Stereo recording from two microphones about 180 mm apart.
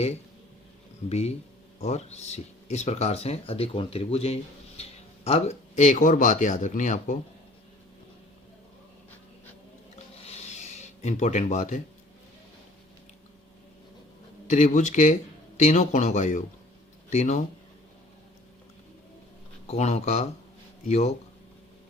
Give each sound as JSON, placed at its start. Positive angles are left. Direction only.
{"t": 1.8, "sound": "speech", "side_deg": 35}
{"t": 9.9, "sound": "a sound", "side_deg": 35}
{"t": 14.4, "sound": "speech", "side_deg": 40}
{"t": 19.6, "sound": "speech", "side_deg": 35}